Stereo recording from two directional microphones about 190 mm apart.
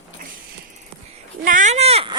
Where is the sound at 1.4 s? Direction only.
45° right (ahead or behind).